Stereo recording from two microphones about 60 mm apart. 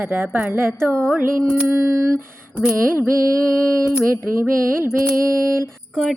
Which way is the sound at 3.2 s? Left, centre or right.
Right.